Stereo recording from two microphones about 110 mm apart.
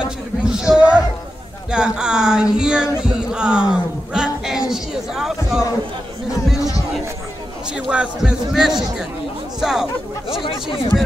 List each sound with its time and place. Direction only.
0.5 s a sound: 5° right (ahead or behind)
1.7 s speech: 5° right (ahead or behind)
7.9 s speech: 10° right (ahead or behind)
10.4 s speech: 50° left (ahead or behind)